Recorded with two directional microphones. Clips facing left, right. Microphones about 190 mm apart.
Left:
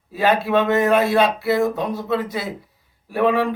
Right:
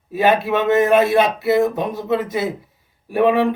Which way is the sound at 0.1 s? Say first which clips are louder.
Right 1 dB; 20° right (ahead or behind).